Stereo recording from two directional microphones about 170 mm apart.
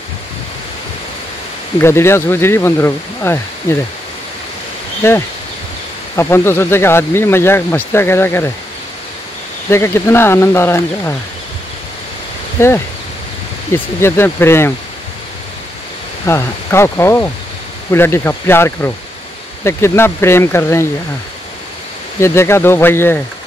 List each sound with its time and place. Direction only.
1.8 s speech: 15° left (ahead or behind)
5.0 s speech: 15° left (ahead or behind)
9.7 s speech: 15° left (ahead or behind)
12.5 s speech: 15° left (ahead or behind)
16.3 s speech: 15° left (ahead or behind)
22.2 s speech: 15° left (ahead or behind)